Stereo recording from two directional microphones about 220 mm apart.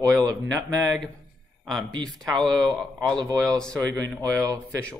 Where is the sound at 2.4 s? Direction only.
20° right (ahead or behind).